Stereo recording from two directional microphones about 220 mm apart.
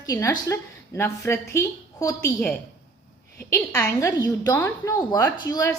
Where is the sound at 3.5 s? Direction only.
10° left (ahead or behind).